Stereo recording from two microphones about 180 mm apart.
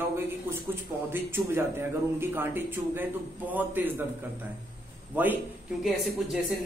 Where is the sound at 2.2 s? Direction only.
10° right (ahead or behind).